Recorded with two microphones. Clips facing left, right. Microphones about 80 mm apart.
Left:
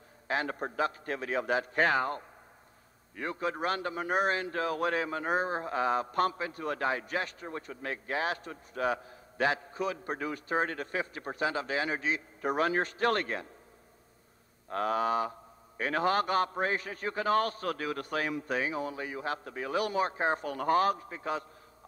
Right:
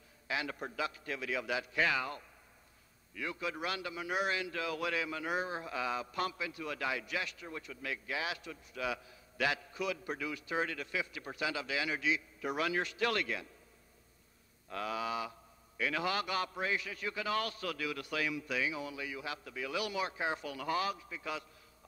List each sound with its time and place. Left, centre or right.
0.3 s speech: left
14.7 s speech: left